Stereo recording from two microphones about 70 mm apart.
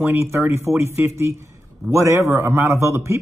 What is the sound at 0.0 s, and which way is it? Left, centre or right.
Speech, right.